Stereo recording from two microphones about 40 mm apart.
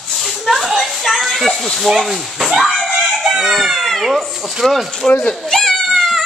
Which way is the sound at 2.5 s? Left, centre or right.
Centre.